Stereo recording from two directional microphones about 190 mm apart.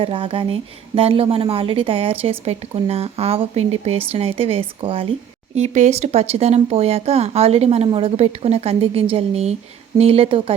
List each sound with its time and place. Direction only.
0.0 s a woman's voice: 30° right (ahead or behind)